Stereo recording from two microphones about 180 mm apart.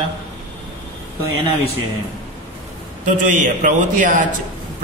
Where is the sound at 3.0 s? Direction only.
45° right (ahead or behind).